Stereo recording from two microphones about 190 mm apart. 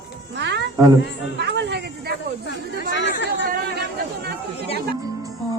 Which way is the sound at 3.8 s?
60° right (ahead or behind).